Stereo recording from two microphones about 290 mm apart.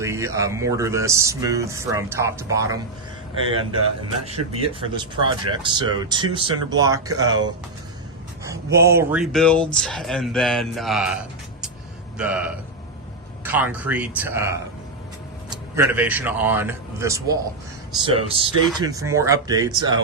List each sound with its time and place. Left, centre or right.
0.0 s speech: centre
12.1 s a man's voice: centre
15.7 s a man's voice: centre